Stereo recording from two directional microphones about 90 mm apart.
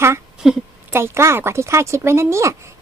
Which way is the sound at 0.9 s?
30° right (ahead or behind).